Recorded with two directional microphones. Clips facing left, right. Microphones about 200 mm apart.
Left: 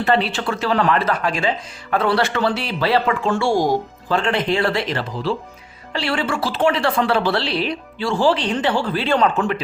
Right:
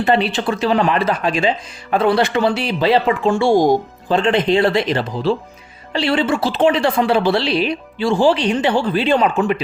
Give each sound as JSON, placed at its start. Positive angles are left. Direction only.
{"t": 0.0, "sound": "a woman's voice", "side_deg": -15}